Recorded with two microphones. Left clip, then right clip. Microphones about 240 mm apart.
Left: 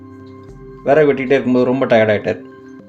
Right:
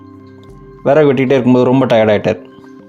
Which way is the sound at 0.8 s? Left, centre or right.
Right.